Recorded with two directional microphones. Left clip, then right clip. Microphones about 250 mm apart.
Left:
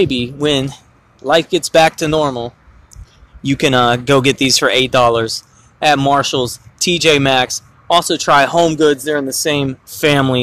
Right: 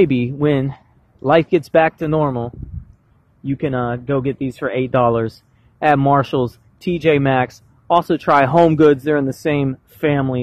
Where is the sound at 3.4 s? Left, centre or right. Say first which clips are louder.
Left 9 dB; centre.